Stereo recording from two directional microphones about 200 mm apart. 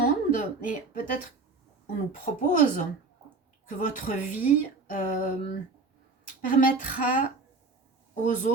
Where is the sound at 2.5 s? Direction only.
40° left (ahead or behind).